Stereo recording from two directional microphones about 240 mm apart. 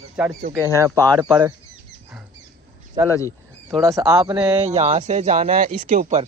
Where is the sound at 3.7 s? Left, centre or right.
Centre.